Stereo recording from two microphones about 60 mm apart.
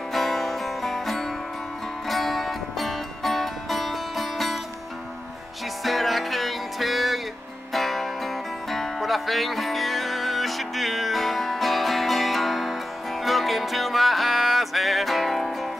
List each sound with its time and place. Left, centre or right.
0.1 s music: centre
5.9 s music: centre